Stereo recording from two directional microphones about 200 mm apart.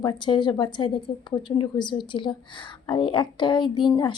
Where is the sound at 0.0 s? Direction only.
20° left (ahead or behind).